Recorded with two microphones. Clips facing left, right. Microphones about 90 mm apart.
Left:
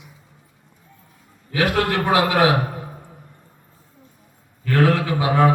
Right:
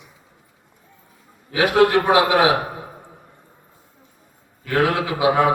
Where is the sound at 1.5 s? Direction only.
15° right (ahead or behind).